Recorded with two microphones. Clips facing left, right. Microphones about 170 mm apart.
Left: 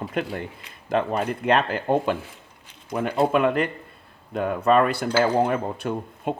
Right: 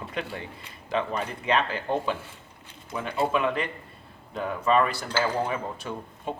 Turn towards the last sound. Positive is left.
turn(degrees=60)  # may be behind; listen again after turning